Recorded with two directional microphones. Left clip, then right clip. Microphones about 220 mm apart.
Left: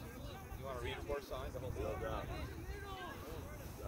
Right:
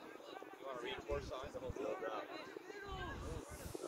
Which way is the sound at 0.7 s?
45° left (ahead or behind).